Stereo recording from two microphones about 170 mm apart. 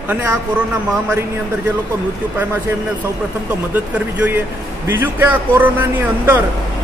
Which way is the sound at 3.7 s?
10° right (ahead or behind).